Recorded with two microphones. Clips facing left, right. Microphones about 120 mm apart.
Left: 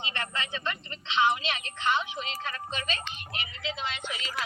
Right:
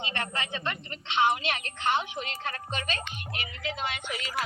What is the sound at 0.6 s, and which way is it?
A woman's voice, 55° right (ahead or behind).